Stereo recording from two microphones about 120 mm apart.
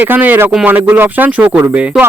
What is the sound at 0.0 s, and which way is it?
Speech, 15° right (ahead or behind).